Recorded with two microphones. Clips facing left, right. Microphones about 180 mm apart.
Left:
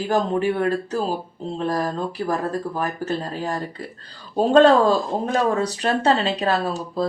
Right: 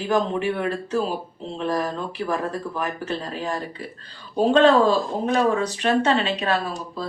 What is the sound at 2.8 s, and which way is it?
Speech, 35° left (ahead or behind).